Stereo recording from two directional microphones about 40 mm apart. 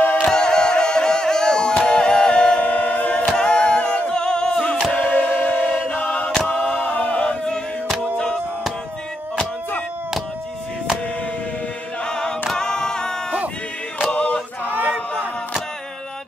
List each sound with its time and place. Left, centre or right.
0.2 s music: centre
2.6 s a capella: left
3.3 s a capella: left
5.1 s music: left
5.7 s choir: left
6.8 s a sound: left
7.2 s a sound: centre
12.0 s choir: left
12.5 s a capella: centre
14.1 s choir: left
14.6 s a sound: right